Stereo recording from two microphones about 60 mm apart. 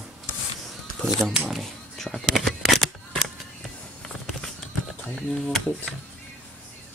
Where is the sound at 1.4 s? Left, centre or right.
Centre.